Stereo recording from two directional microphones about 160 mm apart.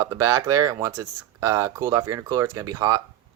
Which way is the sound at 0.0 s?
20° right (ahead or behind).